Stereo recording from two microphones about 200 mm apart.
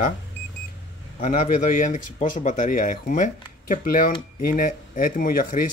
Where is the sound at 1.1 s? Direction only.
40° left (ahead or behind).